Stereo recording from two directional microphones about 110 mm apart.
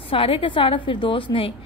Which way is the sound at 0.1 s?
55° left (ahead or behind).